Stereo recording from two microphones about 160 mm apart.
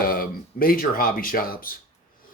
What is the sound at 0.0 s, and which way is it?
Speech, 65° left (ahead or behind).